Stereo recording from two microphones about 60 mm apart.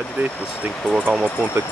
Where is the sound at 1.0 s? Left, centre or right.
Right.